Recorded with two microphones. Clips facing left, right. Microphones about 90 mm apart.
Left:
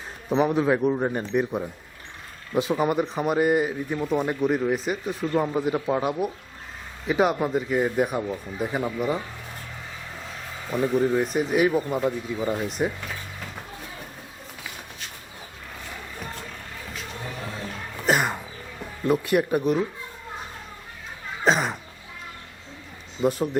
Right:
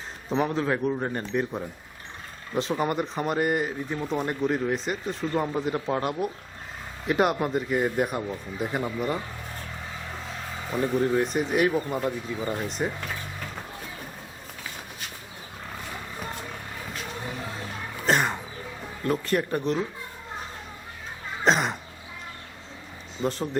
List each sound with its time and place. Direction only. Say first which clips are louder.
0.3 s speech: left 4 dB; 10° left (ahead or behind)
10.7 s speech: left 2 dB; 5° left (ahead or behind)
18.0 s cough: left 1 dB; 5° left (ahead or behind)
19.0 s speech: left 4 dB; 10° left (ahead or behind)
21.4 s speech: left 1 dB; 5° left (ahead or behind)
23.2 s speech: left 5 dB; 10° left (ahead or behind)